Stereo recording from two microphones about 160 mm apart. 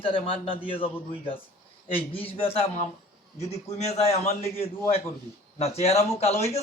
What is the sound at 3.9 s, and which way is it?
A man's voice, 40° left (ahead or behind).